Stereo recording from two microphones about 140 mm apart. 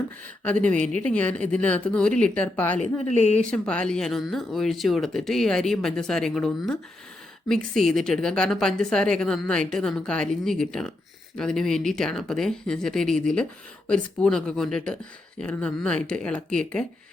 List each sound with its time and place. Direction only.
0.4 s speech: 10° left (ahead or behind)
2.8 s speech: 50° left (ahead or behind)
3.4 s speech: 5° left (ahead or behind)